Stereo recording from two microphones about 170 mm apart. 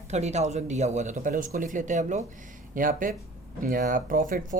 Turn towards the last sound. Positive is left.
turn(degrees=-50)  # may be behind; listen again after turning